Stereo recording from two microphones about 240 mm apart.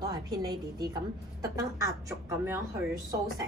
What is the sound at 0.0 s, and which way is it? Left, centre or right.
A woman's voice, centre.